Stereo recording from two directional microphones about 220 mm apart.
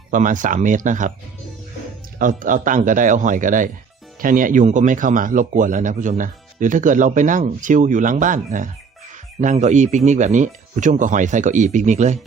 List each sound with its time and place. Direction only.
0.1 s a man's voice: 35° right (ahead or behind)
2.1 s a man's voice: 35° right (ahead or behind)